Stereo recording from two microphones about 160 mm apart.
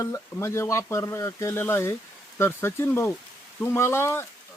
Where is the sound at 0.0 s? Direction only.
15° left (ahead or behind).